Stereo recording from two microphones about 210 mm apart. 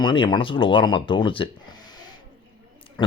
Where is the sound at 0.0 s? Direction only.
20° left (ahead or behind).